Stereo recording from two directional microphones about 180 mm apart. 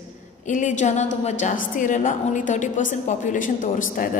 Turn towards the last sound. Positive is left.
turn(degrees=50)  # may be behind; listen again after turning